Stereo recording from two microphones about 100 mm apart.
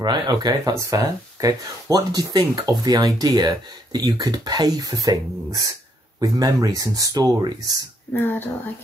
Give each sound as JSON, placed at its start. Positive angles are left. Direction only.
{"t": 0.0, "sound": "speech", "side_deg": -45}
{"t": 8.1, "sound": "speech", "side_deg": 20}